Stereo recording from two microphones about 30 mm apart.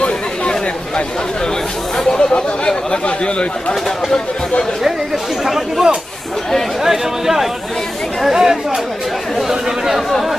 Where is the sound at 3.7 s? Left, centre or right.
Centre.